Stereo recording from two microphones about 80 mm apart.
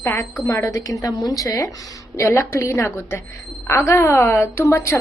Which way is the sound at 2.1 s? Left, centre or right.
Left.